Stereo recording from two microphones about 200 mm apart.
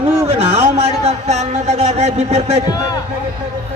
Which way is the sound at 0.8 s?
30° right (ahead or behind).